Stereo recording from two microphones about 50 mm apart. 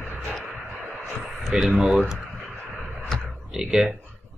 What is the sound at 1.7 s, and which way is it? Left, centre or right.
Speech, centre.